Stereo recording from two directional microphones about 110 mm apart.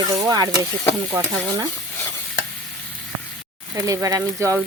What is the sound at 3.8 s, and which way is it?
Speech, 30° right (ahead or behind).